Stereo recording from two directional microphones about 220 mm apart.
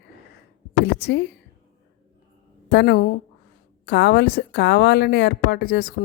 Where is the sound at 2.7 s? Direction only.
50° left (ahead or behind).